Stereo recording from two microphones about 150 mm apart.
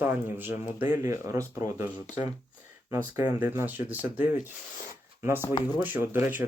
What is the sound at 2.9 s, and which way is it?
Speech, 15° right (ahead or behind).